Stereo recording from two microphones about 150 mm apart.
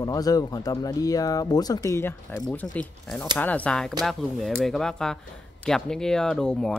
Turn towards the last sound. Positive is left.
turn(degrees=5)  # may be behind; listen again after turning